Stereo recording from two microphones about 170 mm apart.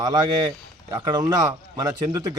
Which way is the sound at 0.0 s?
20° right (ahead or behind).